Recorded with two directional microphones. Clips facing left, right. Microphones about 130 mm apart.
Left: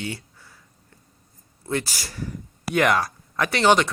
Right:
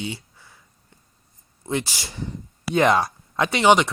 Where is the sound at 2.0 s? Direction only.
25° right (ahead or behind).